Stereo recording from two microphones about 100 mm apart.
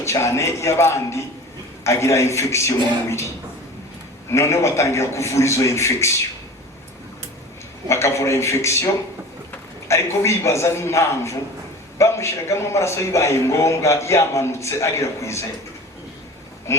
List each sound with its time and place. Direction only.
0.0 s a man's voice: 30° left (ahead or behind)
4.3 s a man's voice: 25° left (ahead or behind)
7.9 s a man's voice: 30° left (ahead or behind)
9.9 s a man's voice: 30° left (ahead or behind)